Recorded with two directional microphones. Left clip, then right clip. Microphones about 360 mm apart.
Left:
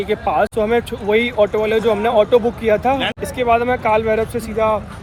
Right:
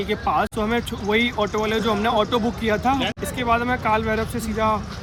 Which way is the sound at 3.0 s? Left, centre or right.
Centre.